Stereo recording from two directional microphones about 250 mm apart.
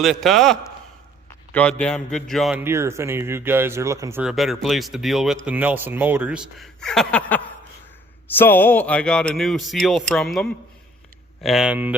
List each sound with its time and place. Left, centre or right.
0.0 s a man's voice: centre